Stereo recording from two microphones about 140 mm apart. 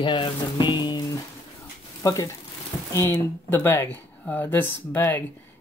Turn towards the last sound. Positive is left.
turn(degrees=15)  # may be behind; listen again after turning